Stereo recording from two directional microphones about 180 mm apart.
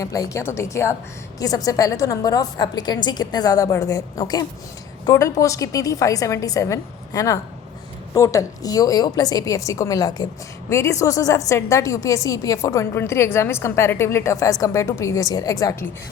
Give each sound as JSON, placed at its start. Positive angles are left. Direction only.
{"t": 0.0, "sound": "a woman's voice", "side_deg": 20}